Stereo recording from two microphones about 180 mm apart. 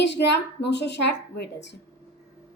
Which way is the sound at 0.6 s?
70° left (ahead or behind).